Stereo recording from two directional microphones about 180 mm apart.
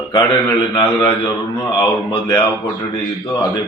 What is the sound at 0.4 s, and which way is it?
A man's voice, 20° left (ahead or behind).